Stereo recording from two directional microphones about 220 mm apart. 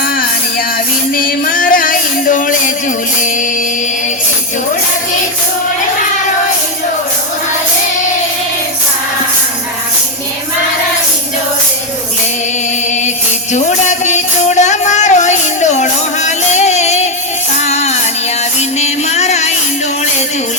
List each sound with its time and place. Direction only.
1.1 s music: 40° left (ahead or behind)
13.5 s music: 35° left (ahead or behind)